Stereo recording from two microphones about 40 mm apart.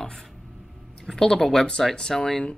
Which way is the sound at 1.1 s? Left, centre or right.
Centre.